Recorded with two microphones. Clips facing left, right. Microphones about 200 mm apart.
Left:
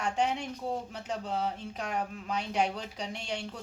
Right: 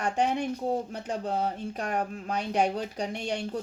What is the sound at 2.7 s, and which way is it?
Speech, 55° right (ahead or behind).